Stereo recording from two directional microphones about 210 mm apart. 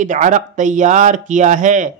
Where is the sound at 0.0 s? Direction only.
35° right (ahead or behind).